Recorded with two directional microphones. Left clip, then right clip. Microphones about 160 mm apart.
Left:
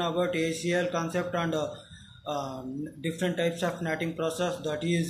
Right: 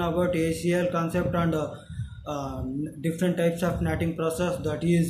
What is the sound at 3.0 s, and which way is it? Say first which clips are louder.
Speech: right 3 dB; 30° right (ahead or behind).